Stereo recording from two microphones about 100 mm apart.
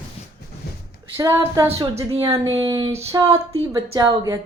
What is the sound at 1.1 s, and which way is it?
Speech, 35° right (ahead or behind).